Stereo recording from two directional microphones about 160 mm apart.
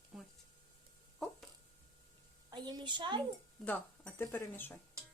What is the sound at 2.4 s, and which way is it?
Speech, 25° right (ahead or behind).